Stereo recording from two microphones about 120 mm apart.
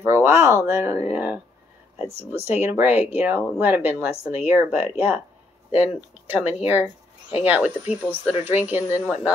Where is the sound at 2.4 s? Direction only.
20° right (ahead or behind).